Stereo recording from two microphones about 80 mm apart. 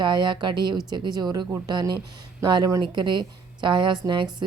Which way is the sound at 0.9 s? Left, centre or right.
Right.